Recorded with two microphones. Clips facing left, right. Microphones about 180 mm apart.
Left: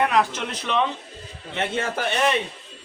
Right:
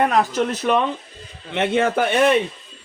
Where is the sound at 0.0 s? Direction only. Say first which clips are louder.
Right 3 dB; 40° right (ahead or behind).